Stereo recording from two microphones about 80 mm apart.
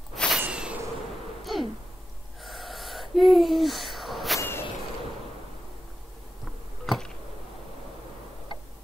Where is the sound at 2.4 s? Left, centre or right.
Centre.